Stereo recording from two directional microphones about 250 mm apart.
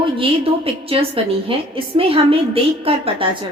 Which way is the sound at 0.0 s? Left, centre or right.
Right.